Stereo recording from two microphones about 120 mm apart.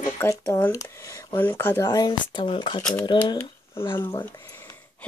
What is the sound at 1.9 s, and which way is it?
Speech, 35° left (ahead or behind).